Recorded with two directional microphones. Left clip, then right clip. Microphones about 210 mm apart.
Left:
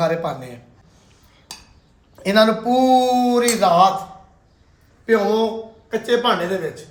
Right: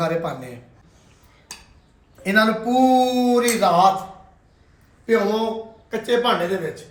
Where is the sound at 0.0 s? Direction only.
Centre (ahead or behind).